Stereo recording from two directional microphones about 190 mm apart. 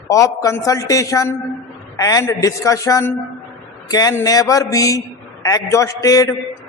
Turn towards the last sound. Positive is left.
turn(degrees=20)  # may be behind; listen again after turning